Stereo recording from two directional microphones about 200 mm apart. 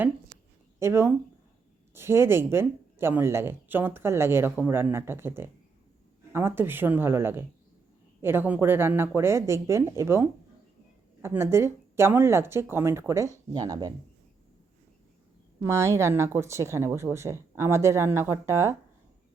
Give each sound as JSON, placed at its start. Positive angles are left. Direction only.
{"t": 0.8, "sound": "speech", "side_deg": -10}
{"t": 15.6, "sound": "speech", "side_deg": -15}